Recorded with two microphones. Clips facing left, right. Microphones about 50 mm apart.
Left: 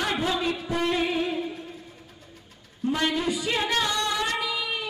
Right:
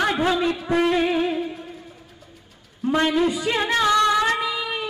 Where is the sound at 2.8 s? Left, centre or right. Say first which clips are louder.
Right 5 dB; right.